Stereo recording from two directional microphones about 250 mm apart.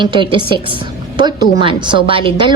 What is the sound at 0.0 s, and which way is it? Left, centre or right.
A woman's voice, centre.